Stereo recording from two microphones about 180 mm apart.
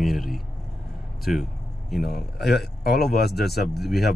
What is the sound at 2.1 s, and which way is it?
A man's voice, 60° left (ahead or behind).